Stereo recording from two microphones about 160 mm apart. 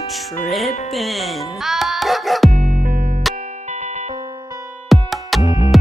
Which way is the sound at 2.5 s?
50° right (ahead or behind).